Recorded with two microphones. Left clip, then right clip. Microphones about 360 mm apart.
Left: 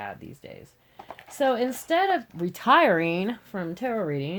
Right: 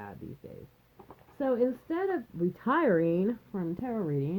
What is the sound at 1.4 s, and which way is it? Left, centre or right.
A woman's voice, left.